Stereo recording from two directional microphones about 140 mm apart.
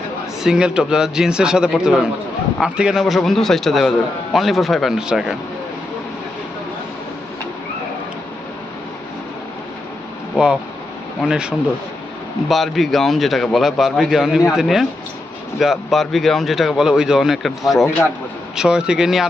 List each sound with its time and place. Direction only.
0.4 s speech: 5° right (ahead or behind)
10.3 s speech: 5° right (ahead or behind)